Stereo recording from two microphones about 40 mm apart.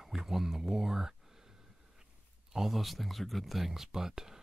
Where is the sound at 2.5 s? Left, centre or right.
Centre.